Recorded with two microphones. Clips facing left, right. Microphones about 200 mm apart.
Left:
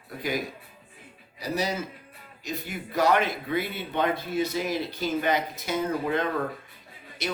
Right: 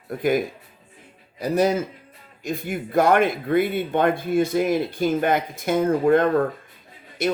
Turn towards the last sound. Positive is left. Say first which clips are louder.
# right 9 dB
turn(degrees=-50)  # may be behind; listen again after turning